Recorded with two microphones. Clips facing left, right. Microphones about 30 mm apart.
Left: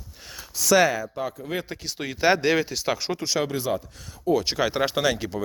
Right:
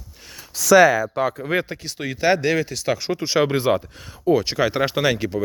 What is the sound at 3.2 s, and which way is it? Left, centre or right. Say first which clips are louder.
Speech: right 6 dB; right.